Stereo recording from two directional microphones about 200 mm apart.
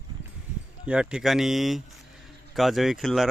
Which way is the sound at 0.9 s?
5° right (ahead or behind).